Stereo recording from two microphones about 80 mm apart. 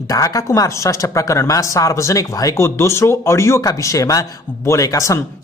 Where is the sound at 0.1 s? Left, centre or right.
Left.